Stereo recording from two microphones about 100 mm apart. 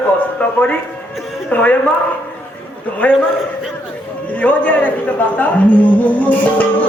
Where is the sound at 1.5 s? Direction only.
15° left (ahead or behind).